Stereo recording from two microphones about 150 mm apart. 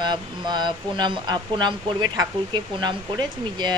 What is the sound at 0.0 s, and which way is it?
Speech, 30° right (ahead or behind).